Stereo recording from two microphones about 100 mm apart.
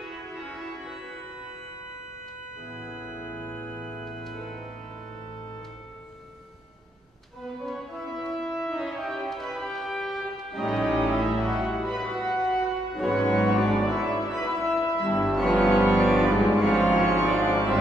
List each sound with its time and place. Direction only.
3.3 s organ: 15° left (ahead or behind)
7.6 s music: centre (ahead or behind)